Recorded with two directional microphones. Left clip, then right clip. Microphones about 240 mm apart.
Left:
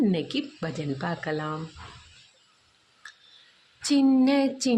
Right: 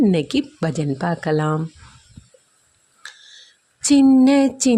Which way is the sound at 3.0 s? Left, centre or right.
Right.